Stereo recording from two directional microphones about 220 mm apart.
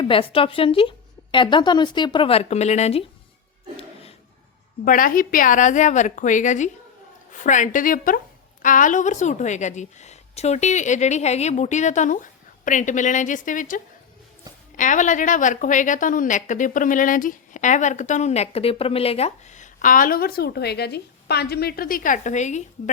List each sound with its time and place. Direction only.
0.0 s a woman's voice: 25° left (ahead or behind)
4.9 s a woman's voice: 40° left (ahead or behind)